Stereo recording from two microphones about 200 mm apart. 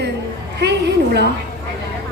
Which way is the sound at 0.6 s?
55° right (ahead or behind).